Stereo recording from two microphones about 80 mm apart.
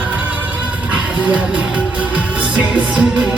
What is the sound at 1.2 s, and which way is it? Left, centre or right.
Music, centre.